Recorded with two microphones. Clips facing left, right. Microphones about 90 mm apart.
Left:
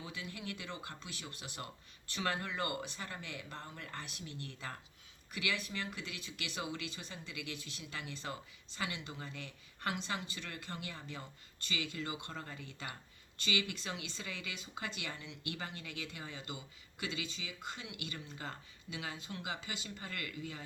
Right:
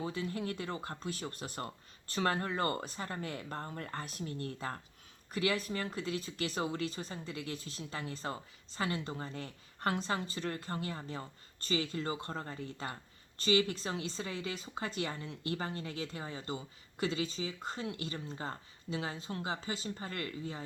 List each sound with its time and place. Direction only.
0.0 s speech: 40° right (ahead or behind)